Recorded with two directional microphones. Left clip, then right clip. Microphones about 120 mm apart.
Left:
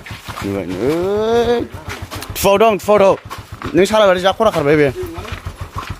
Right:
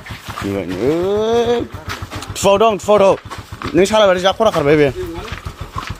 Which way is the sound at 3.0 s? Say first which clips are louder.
Even; 5° left (ahead or behind).